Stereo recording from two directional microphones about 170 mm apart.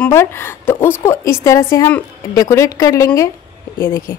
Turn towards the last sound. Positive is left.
turn(degrees=15)  # may be behind; listen again after turning